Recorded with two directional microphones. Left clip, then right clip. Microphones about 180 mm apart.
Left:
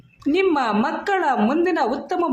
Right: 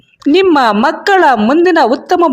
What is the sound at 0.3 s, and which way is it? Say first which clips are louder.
A woman's voice: right 11 dB; 50° right (ahead or behind).